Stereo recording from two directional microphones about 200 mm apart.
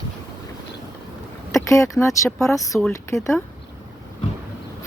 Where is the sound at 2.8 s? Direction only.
5° left (ahead or behind).